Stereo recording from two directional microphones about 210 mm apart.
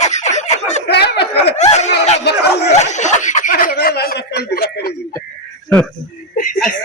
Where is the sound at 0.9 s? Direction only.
50° left (ahead or behind).